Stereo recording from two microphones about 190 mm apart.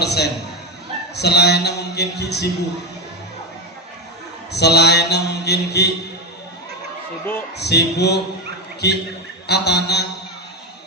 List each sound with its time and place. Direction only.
0.0 s speech: 60° left (ahead or behind)
4.5 s speech: 60° left (ahead or behind)
7.5 s speech: 60° left (ahead or behind)